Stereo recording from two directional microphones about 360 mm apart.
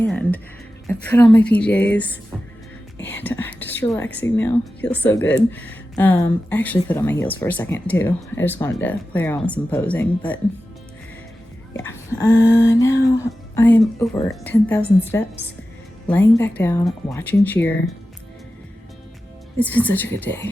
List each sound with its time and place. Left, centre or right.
0.0 s speech: centre
11.9 s a sound: centre
13.6 s speech: centre
19.5 s speech: centre